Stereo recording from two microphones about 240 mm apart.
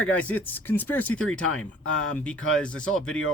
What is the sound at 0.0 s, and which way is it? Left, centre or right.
A man's voice, centre.